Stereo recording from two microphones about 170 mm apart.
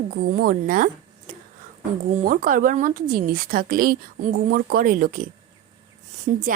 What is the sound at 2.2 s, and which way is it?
A woman's voice, 55° right (ahead or behind).